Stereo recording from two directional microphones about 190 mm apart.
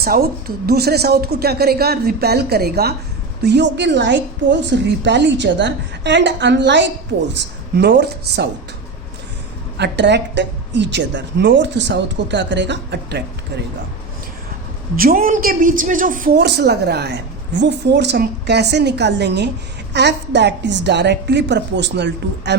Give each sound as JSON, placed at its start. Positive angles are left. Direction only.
{"t": 0.0, "sound": "a woman's voice", "side_deg": -50}
{"t": 9.7, "sound": "a woman's voice", "side_deg": -65}
{"t": 14.9, "sound": "a woman's voice", "side_deg": -50}
{"t": 16.4, "sound": "a woman's voice", "side_deg": -60}